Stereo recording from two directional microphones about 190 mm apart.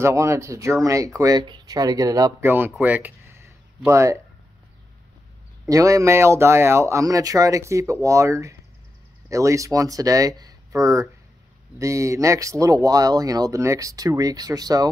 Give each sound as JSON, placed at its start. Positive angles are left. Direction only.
{"t": 0.0, "sound": "speech", "side_deg": -15}
{"t": 2.8, "sound": "a sound", "side_deg": -10}
{"t": 5.7, "sound": "speech", "side_deg": -15}